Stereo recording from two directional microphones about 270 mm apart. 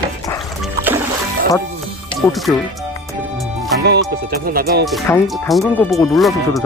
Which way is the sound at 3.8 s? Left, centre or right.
Right.